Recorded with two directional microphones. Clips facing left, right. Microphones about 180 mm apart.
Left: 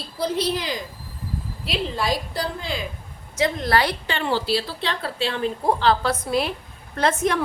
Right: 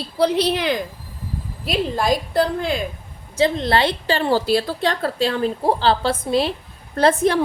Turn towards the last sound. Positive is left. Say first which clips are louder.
# right 5 dB
turn(degrees=-35)  # may be behind; listen again after turning